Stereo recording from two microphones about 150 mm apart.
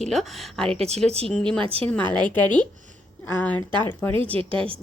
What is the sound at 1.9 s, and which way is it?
A woman's voice, 10° left (ahead or behind).